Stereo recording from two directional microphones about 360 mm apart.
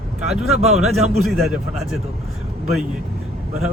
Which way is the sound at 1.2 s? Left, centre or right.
Centre.